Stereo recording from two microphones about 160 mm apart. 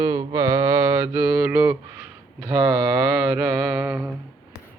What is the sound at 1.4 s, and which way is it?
Mantra, 10° right (ahead or behind).